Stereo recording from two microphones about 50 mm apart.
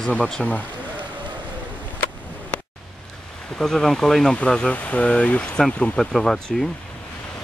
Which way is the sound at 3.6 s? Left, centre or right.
Centre.